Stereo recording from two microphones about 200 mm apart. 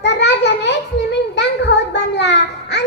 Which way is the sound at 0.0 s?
60° left (ahead or behind).